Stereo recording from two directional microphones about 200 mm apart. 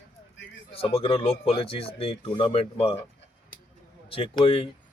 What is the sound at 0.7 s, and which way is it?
Speech, 30° left (ahead or behind).